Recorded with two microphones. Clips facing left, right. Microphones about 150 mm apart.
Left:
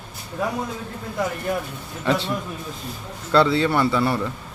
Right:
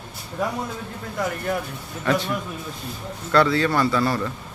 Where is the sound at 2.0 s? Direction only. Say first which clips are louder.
Even; 20° left (ahead or behind).